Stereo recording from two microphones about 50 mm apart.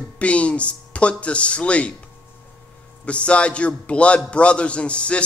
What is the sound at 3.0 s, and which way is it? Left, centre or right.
A man's voice, left.